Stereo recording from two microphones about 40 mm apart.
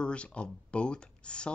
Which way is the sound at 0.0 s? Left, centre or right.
Left.